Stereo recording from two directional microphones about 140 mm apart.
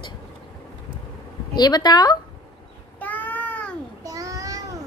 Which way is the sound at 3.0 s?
10° left (ahead or behind).